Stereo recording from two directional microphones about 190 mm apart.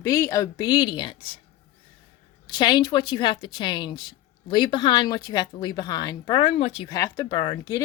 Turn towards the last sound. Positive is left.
turn(degrees=30)  # may be behind; listen again after turning